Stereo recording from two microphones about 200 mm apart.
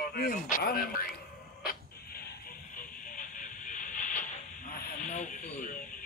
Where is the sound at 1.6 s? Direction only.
50° left (ahead or behind).